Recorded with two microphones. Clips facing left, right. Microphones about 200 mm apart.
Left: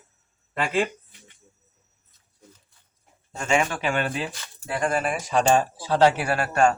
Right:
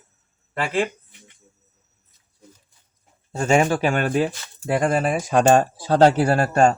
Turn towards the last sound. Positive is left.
turn(degrees=-35)  # may be behind; listen again after turning